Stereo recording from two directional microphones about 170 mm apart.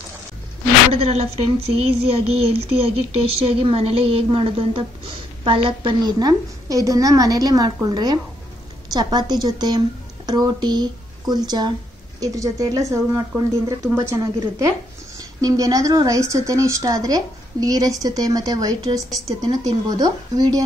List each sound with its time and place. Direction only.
0.9 s a woman's voice: 35° right (ahead or behind)